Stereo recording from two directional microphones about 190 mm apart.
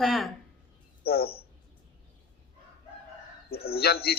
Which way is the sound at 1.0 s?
55° left (ahead or behind).